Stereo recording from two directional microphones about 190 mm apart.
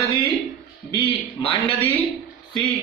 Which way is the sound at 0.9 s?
25° left (ahead or behind).